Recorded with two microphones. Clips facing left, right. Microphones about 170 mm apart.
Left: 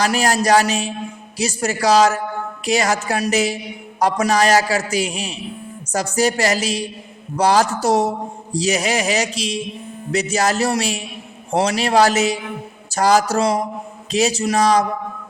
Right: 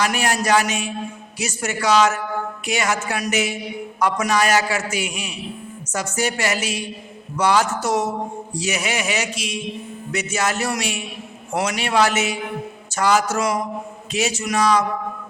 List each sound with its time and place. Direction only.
0.0 s a man's voice: 35° left (ahead or behind)